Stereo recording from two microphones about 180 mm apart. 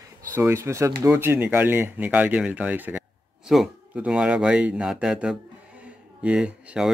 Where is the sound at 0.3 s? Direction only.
15° right (ahead or behind).